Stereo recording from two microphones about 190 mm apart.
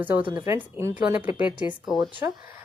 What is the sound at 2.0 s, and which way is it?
Speech, 20° right (ahead or behind).